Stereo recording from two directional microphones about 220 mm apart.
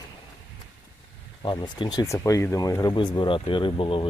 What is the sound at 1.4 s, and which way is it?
Speech, 20° left (ahead or behind).